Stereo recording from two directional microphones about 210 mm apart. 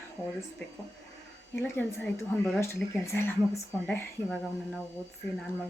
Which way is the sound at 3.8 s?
5° left (ahead or behind).